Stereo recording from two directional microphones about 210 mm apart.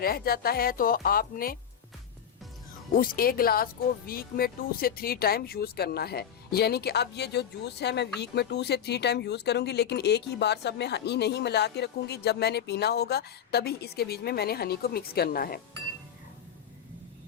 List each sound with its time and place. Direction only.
0.0 s speech: 45° left (ahead or behind)
2.9 s speech: 45° left (ahead or behind)